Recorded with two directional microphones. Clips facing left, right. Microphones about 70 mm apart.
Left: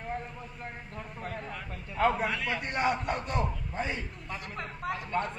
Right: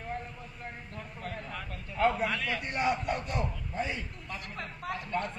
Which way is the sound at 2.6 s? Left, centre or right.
Left.